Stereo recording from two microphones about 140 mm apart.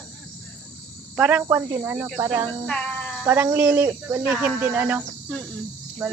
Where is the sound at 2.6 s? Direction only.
5° left (ahead or behind).